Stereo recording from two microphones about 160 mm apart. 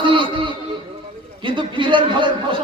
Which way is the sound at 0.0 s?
30° right (ahead or behind).